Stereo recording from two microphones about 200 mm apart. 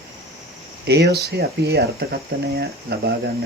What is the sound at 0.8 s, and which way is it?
Speech, 55° right (ahead or behind).